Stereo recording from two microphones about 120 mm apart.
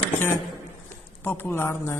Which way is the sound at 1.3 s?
15° left (ahead or behind).